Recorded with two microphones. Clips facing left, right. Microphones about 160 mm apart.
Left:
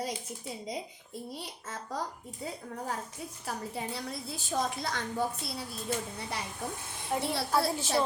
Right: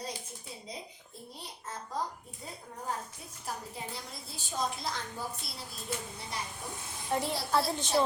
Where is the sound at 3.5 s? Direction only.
65° left (ahead or behind).